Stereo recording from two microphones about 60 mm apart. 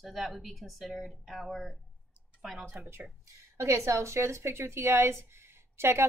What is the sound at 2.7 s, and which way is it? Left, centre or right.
Speech, right.